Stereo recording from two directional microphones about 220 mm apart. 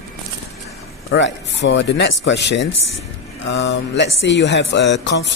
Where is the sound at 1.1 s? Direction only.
55° left (ahead or behind).